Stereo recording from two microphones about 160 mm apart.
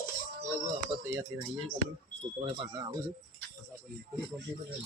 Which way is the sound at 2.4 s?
30° right (ahead or behind).